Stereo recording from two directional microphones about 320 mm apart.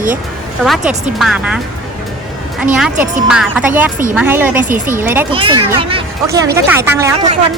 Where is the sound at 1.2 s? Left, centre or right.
Centre.